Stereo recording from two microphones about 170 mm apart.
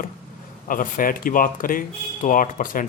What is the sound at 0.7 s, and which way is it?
A man's voice, 55° left (ahead or behind).